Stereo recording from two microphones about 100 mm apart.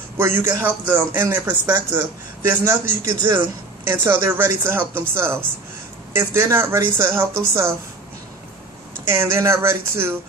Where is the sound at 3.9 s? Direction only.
20° right (ahead or behind).